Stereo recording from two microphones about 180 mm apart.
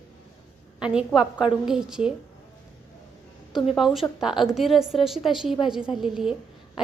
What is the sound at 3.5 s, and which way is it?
A woman's voice, centre (ahead or behind).